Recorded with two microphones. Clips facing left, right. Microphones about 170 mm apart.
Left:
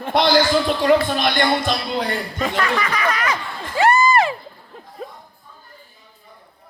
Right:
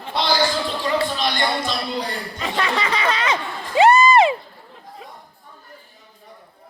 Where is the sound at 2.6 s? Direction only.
25° right (ahead or behind).